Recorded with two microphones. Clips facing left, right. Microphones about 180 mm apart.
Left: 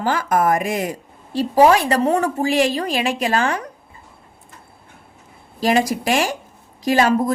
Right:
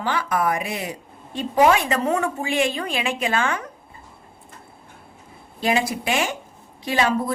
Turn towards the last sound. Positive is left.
turn(degrees=40)  # may be behind; listen again after turning